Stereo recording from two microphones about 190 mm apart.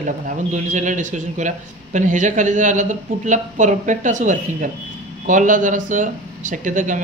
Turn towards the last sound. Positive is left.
turn(degrees=-45)  # may be behind; listen again after turning